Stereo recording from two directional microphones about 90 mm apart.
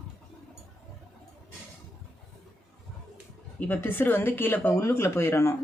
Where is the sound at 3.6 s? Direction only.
20° left (ahead or behind).